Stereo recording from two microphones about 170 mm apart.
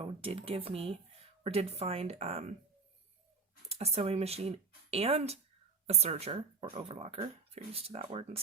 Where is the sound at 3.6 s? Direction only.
35° right (ahead or behind).